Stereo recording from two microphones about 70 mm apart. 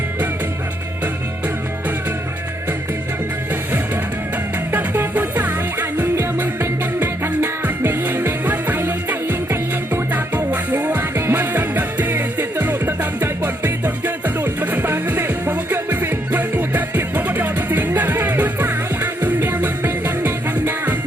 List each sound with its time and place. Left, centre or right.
4.7 s music: right